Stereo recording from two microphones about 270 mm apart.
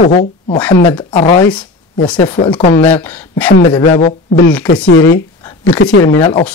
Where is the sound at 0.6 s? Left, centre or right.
Centre.